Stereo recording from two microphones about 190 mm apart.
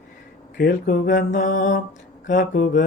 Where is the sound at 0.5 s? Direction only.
50° left (ahead or behind).